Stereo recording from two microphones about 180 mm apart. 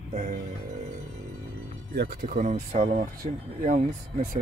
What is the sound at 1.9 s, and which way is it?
Speech, 65° right (ahead or behind).